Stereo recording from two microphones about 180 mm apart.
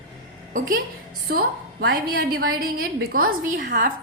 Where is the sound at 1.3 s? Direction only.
60° right (ahead or behind).